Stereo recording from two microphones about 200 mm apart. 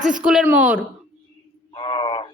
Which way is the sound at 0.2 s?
5° right (ahead or behind).